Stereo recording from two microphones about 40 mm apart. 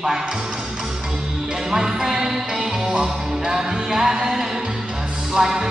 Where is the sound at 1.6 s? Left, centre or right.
Centre.